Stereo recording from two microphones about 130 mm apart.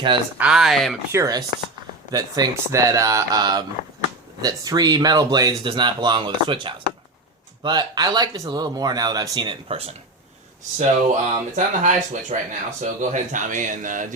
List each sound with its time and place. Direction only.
0.3 s speech: 5° right (ahead or behind)
1.1 s speech: 25° right (ahead or behind); by 9.9 s 45° right (ahead or behind)
10.8 s speech: 75° right (ahead or behind)